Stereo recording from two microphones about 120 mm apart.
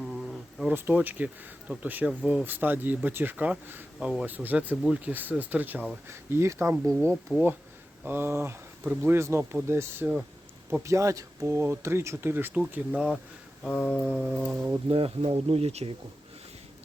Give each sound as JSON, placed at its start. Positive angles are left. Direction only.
{"t": 0.0, "sound": "a sound", "side_deg": 0}
{"t": 0.7, "sound": "speech", "side_deg": -15}
{"t": 13.7, "sound": "a sound", "side_deg": 10}
{"t": 14.2, "sound": "music", "side_deg": -5}
{"t": 14.5, "sound": "speech", "side_deg": -20}
{"t": 14.8, "sound": "speech", "side_deg": -50}